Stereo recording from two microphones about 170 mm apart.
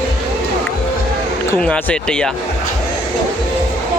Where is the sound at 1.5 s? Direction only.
5° left (ahead or behind).